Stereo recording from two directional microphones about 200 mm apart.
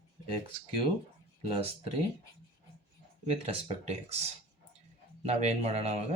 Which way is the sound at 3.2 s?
30° right (ahead or behind).